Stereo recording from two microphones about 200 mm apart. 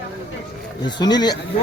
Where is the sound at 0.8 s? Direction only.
20° left (ahead or behind).